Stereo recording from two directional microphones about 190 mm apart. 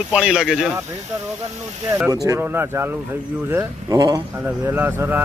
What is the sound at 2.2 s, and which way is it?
Speech, 15° right (ahead or behind).